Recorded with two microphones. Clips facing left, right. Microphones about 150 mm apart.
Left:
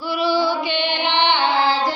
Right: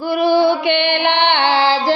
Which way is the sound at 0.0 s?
50° right (ahead or behind).